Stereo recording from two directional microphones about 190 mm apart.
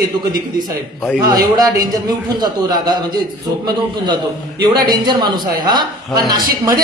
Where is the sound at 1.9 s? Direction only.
20° right (ahead or behind).